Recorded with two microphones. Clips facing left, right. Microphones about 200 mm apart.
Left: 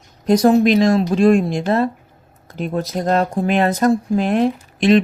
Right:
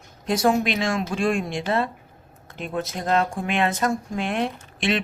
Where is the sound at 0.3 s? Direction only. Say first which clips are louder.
Left 8 dB; 40° left (ahead or behind).